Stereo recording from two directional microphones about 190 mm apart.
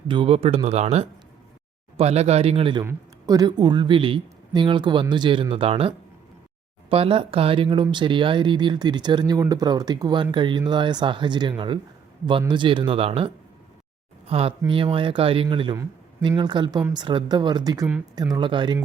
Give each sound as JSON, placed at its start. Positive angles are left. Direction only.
{"t": 0.1, "sound": "speech", "side_deg": -30}
{"t": 6.9, "sound": "speech", "side_deg": -30}